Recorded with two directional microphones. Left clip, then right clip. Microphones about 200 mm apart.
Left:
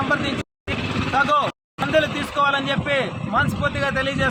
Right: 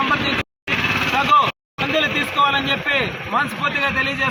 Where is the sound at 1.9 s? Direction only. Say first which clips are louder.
Right 1 dB; 20° left (ahead or behind).